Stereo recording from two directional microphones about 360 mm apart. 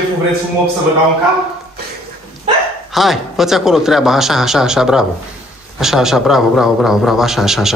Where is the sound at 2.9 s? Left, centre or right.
Centre.